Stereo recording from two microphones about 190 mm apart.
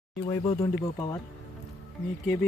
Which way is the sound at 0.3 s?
25° left (ahead or behind).